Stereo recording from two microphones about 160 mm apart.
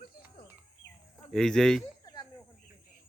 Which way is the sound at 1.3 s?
5° left (ahead or behind).